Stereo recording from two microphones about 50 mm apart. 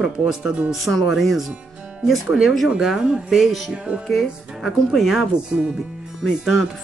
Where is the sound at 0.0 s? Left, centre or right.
Centre.